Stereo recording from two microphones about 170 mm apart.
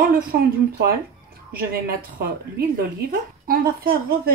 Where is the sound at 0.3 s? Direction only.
60° right (ahead or behind).